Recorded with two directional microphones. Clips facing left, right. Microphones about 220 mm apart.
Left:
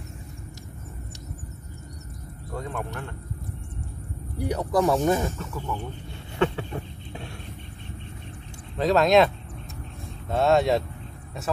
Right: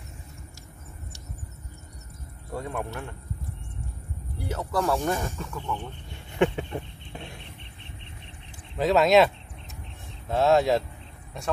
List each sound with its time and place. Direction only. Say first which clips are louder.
2.5 s a man's voice: right 1 dB; 10° right (ahead or behind)
4.4 s speech: left 5 dB; 15° left (ahead or behind)
6.3 s a sound: right 1 dB; 20° right (ahead or behind)
8.7 s speech: even; centre (ahead or behind)